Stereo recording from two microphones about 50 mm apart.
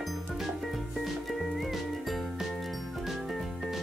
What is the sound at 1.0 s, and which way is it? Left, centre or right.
Music, centre.